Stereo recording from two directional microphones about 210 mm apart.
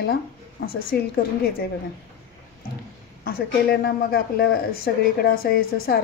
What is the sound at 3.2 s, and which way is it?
Speech, 45° left (ahead or behind).